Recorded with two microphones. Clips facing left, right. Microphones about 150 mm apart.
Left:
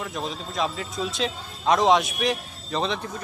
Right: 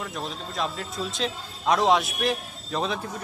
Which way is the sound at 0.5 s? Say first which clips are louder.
Left 2 dB; centre (ahead or behind).